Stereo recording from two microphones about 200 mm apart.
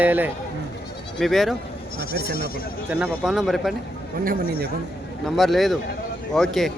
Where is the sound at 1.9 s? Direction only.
50° left (ahead or behind).